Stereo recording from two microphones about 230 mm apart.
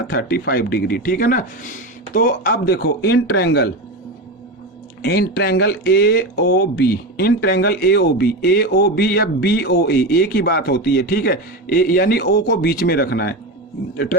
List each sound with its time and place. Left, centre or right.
0.1 s speech: left
5.0 s speech: left